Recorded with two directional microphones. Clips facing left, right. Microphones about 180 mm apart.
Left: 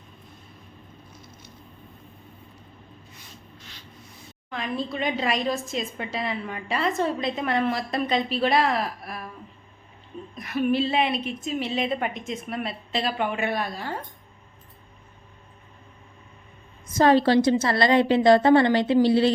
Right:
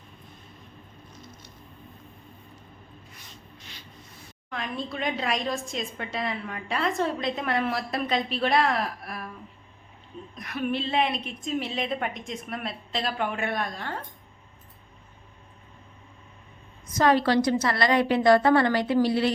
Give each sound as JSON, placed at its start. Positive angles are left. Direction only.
{"t": 4.4, "sound": "a woman's voice", "side_deg": 0}
{"t": 10.3, "sound": "a woman's voice", "side_deg": 0}
{"t": 16.9, "sound": "a woman's voice", "side_deg": 30}